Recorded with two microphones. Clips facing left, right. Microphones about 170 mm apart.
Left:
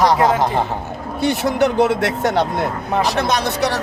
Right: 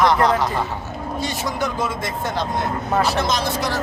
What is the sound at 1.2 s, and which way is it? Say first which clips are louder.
Speech: left 9 dB; 65° left (ahead or behind).